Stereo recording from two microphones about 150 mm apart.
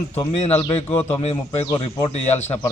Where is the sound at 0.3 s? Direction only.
45° left (ahead or behind).